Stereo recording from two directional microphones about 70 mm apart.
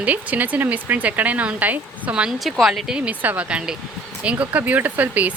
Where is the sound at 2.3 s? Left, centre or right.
Centre.